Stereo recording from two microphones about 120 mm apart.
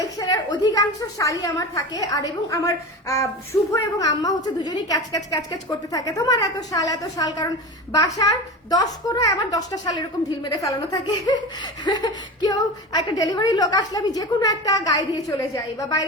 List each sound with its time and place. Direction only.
0.2 s speech: 35° left (ahead or behind)
8.7 s speech: 30° left (ahead or behind)